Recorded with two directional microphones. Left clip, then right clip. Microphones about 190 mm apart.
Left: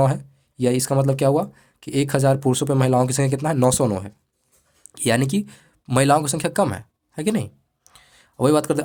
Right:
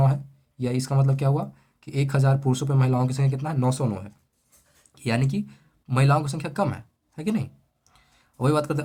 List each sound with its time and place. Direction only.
0.0 s speech: 45° left (ahead or behind)